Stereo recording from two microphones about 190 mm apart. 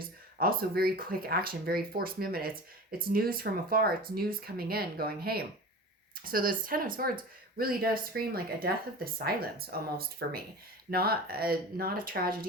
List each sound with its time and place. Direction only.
0.3 s speech: 50° right (ahead or behind)